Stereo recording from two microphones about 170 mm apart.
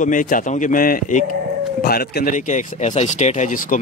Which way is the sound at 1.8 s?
65° left (ahead or behind).